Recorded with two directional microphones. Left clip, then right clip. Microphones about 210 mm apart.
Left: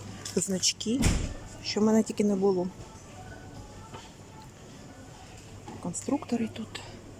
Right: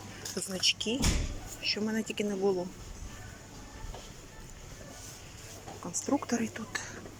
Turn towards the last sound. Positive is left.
turn(degrees=15)  # may be behind; listen again after turning